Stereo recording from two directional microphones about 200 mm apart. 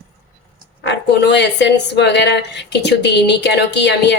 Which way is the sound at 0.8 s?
60° left (ahead or behind).